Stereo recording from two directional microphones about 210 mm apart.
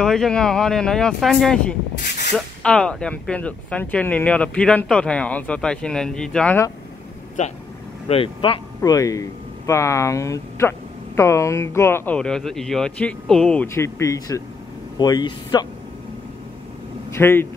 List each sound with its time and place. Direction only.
0.0 s speech: centre (ahead or behind)
7.4 s speech: 35° left (ahead or behind); by 15.6 s 20° left (ahead or behind)
17.1 s speech: 10° left (ahead or behind)